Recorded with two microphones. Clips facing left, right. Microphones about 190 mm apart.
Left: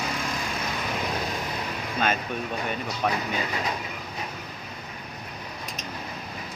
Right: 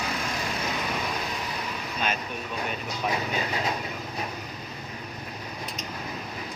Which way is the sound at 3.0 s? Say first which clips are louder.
Left 2 dB; 55° left (ahead or behind).